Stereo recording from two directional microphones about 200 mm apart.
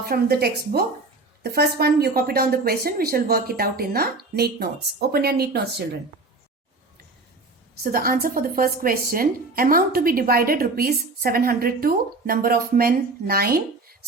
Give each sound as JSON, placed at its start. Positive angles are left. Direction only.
{"t": 0.0, "sound": "a woman's voice", "side_deg": -50}
{"t": 7.9, "sound": "a woman's voice", "side_deg": -45}